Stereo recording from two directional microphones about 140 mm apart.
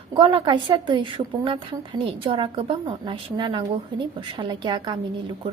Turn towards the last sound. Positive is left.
turn(degrees=-35)  # may be behind; listen again after turning